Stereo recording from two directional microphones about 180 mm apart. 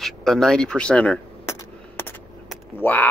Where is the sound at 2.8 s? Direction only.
10° left (ahead or behind).